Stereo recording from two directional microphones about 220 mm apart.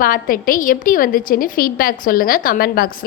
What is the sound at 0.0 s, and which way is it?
A woman's voice, 40° left (ahead or behind).